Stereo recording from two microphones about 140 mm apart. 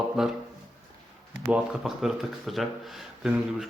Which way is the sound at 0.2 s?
5° right (ahead or behind).